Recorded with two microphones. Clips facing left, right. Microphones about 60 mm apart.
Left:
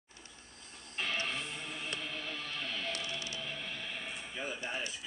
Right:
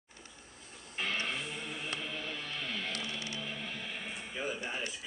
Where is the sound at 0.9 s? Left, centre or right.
Centre.